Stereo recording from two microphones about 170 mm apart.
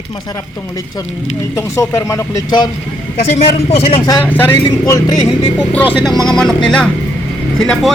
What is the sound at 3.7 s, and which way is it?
Speech, 35° left (ahead or behind).